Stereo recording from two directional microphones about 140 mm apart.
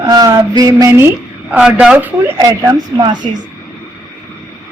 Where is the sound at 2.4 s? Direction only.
25° right (ahead or behind).